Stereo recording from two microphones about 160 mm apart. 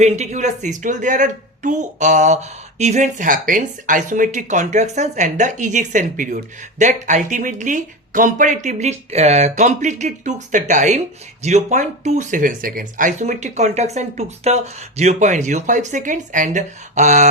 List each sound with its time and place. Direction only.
0.0 s a woman's voice: 45° right (ahead or behind)